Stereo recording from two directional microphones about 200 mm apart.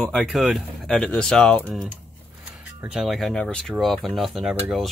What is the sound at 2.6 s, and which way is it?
Speech, 5° right (ahead or behind).